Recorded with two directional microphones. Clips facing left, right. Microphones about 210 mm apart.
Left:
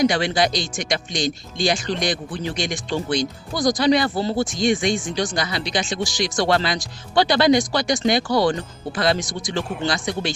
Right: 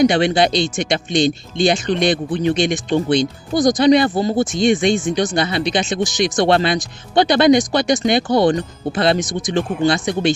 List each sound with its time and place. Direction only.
0.0 s speech: 25° right (ahead or behind)